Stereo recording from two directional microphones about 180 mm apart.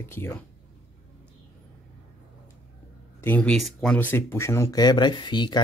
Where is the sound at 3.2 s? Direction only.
10° left (ahead or behind).